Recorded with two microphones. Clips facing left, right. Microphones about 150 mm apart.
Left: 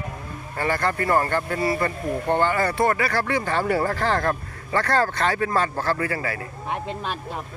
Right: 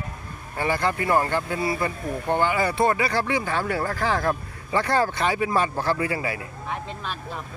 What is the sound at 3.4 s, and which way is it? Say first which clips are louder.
Speech: left 3 dB; centre (ahead or behind).